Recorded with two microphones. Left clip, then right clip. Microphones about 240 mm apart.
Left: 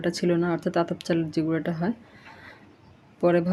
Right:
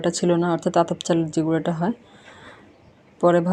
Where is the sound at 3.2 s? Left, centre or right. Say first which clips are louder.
Right 4 dB; centre.